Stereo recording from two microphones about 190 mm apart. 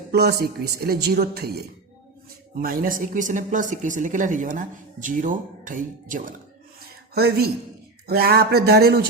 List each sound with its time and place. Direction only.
0.1 s speech: 60° right (ahead or behind)
7.1 s speech: 55° right (ahead or behind)